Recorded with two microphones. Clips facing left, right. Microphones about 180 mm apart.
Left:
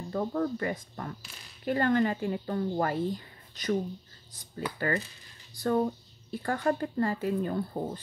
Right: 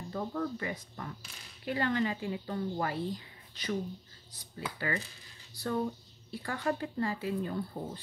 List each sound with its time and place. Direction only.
0.1 s speech: 45° left (ahead or behind)
4.7 s speech: 45° left (ahead or behind)